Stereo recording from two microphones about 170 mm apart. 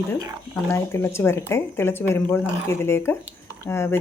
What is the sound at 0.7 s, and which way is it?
Speech, 15° left (ahead or behind).